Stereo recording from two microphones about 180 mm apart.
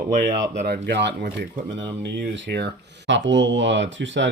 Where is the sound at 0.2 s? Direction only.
65° right (ahead or behind).